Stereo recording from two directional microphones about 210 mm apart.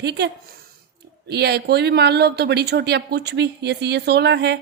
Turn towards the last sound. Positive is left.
turn(degrees=-55)  # may be behind; listen again after turning